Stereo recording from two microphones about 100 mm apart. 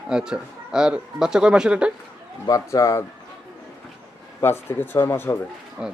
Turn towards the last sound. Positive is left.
turn(degrees=-10)  # may be behind; listen again after turning